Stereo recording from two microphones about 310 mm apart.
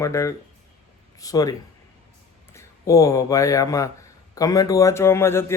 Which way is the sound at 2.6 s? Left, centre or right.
Centre.